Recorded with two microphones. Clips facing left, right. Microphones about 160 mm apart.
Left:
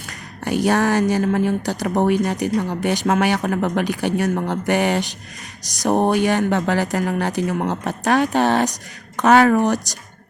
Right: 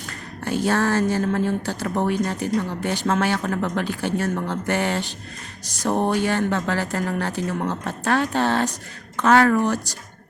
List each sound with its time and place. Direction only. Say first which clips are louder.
0.4 s speech: left 3 dB; 15° left (ahead or behind)